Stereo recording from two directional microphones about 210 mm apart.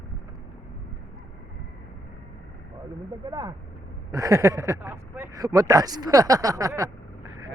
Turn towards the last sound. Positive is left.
turn(degrees=-15)  # may be behind; listen again after turning